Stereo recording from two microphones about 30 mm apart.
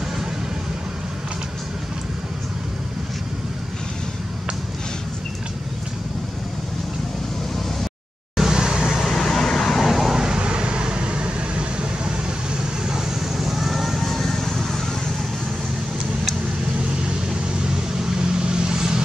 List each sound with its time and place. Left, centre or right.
8.5 s vehicle: right
9.0 s vehicle: centre
9.8 s vehicle: centre
10.1 s vehicle: right
10.4 s vehicle: right
12.8 s vehicle: centre
17.6 s vehicle: right